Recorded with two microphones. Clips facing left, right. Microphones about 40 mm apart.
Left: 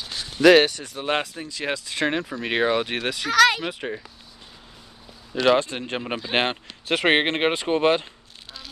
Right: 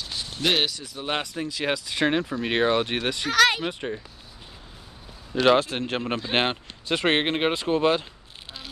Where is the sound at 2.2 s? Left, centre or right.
Centre.